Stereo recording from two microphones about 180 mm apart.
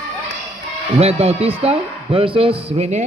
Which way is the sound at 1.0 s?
35° right (ahead or behind).